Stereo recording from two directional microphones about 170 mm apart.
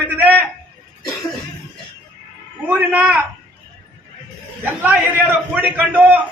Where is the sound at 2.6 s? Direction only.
10° right (ahead or behind).